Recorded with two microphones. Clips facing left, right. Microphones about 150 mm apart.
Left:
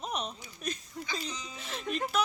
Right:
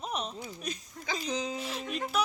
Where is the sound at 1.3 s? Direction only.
90° right.